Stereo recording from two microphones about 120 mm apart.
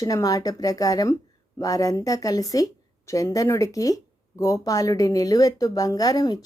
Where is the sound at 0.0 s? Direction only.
30° left (ahead or behind).